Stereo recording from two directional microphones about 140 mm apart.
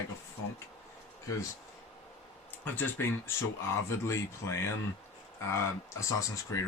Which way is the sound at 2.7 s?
15° left (ahead or behind).